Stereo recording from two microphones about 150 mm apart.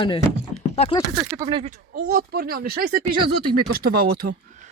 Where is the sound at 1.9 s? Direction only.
90° right.